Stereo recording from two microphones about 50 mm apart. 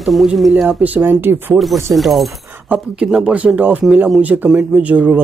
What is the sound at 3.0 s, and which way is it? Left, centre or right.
Speech, centre.